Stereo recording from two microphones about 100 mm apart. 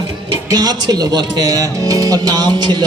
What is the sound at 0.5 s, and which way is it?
A man's voice, 40° right (ahead or behind).